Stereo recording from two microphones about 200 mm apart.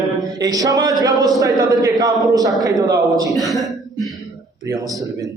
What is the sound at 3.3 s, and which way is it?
Speech, centre (ahead or behind).